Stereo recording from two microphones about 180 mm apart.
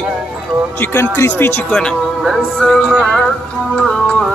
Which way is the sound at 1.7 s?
Centre (ahead or behind).